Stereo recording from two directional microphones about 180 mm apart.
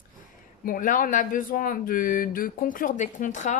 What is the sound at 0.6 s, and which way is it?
Speech, 50° left (ahead or behind).